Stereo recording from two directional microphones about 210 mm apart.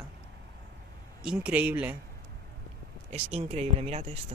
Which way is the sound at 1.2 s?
5° right (ahead or behind).